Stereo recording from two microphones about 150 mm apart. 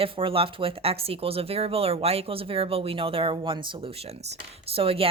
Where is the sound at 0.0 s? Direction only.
35° right (ahead or behind).